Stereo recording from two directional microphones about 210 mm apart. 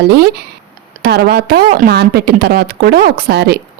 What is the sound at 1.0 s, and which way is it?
Speech, 45° right (ahead or behind).